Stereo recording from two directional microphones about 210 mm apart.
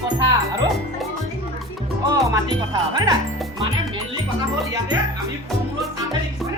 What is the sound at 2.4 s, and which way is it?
Speech, 20° right (ahead or behind).